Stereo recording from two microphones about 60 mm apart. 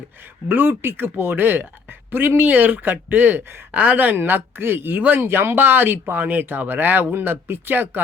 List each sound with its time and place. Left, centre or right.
0.4 s speech: right